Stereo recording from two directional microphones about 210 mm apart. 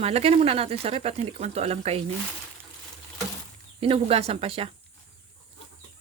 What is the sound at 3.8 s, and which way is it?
Speech, 25° right (ahead or behind).